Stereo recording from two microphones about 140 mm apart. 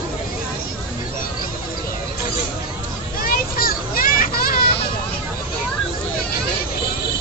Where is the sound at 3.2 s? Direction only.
90° left.